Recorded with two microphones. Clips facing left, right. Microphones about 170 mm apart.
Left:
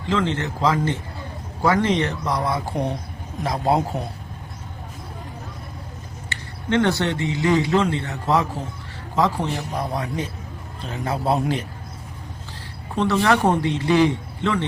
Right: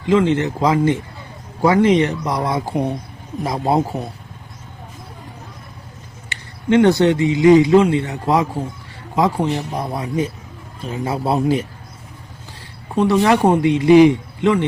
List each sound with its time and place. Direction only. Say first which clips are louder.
0.0 s speech: right 7 dB; 15° right (ahead or behind)
3.4 s a man's voice: right 2 dB; centre (ahead or behind)
6.2 s a man's voice: right 7 dB; 15° right (ahead or behind)
13.0 s speech: right 5 dB; 15° right (ahead or behind)